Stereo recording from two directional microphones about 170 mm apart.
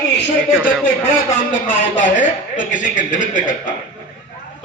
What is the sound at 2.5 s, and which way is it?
A man's voice, 50° left (ahead or behind).